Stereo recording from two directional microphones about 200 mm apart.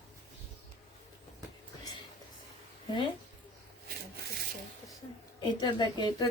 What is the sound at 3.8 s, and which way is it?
Rub, 50° right (ahead or behind).